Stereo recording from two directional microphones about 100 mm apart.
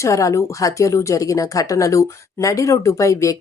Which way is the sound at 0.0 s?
30° left (ahead or behind).